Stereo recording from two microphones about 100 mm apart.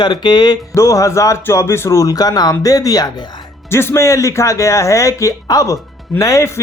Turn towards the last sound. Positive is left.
turn(degrees=30)  # may be behind; listen again after turning